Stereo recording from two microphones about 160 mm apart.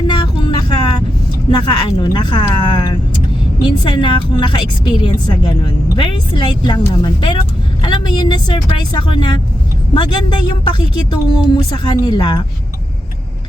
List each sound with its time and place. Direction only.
0.1 s vehicle: 25° left (ahead or behind)
1.5 s a woman's voice: 30° left (ahead or behind)